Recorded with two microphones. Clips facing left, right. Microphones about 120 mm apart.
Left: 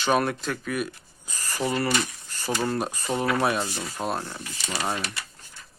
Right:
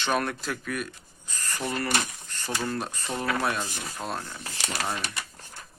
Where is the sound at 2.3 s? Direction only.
10° left (ahead or behind).